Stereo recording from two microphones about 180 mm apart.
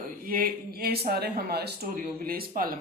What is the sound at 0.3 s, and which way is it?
A woman's voice, 55° right (ahead or behind).